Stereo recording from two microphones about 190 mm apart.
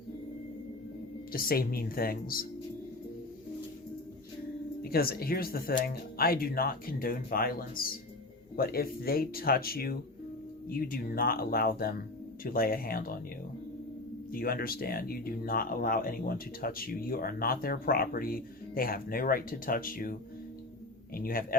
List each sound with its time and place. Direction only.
1.3 s speech: 50° left (ahead or behind)
4.8 s speech: 55° left (ahead or behind)
14.3 s speech: 50° left (ahead or behind)
21.2 s speech: 50° left (ahead or behind)